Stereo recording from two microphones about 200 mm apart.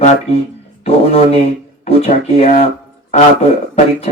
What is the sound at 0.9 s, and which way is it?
Speech, 30° left (ahead or behind).